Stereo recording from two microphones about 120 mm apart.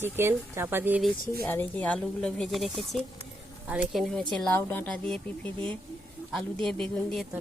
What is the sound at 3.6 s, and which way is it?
Speech, 10° right (ahead or behind).